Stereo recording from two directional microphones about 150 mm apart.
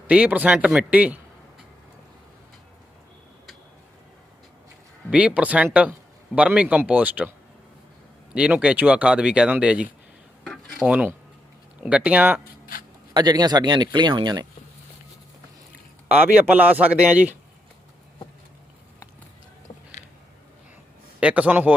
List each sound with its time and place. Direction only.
0.1 s speech: 10° right (ahead or behind)
5.1 s speech: 10° right (ahead or behind)
8.3 s speech: 5° right (ahead or behind)
10.4 s cutlery: 5° left (ahead or behind)
10.8 s speech: 10° right (ahead or behind)
13.1 s speech: 25° right (ahead or behind)
16.1 s speech: 10° right (ahead or behind)
20.0 s a sound: 50° left (ahead or behind)
21.2 s speech: 10° right (ahead or behind)